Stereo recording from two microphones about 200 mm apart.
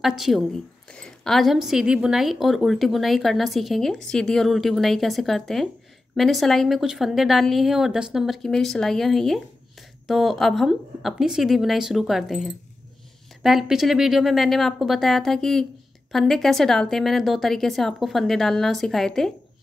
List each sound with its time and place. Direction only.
0.0 s a woman's voice: centre (ahead or behind)